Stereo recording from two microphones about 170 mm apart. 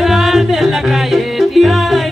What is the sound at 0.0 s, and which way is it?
Music, centre (ahead or behind).